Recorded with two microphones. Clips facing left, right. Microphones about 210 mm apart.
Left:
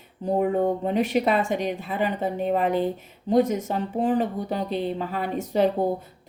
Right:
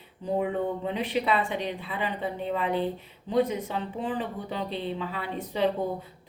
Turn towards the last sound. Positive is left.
turn(degrees=45)  # may be behind; listen again after turning